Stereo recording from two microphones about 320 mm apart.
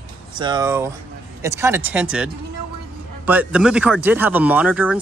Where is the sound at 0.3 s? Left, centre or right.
Centre.